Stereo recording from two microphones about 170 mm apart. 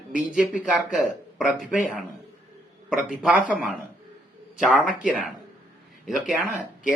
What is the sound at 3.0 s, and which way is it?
Speech, 5° right (ahead or behind).